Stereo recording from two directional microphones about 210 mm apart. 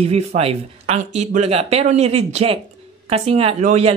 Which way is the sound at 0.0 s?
30° right (ahead or behind).